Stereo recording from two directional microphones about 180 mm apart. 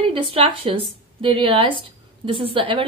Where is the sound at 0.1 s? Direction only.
30° right (ahead or behind).